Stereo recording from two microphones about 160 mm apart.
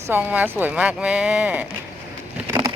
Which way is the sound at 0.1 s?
10° right (ahead or behind).